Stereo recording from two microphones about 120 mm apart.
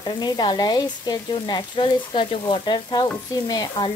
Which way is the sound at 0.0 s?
35° left (ahead or behind).